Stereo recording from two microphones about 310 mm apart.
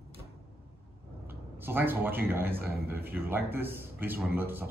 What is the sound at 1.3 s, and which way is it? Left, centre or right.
A man's voice, centre.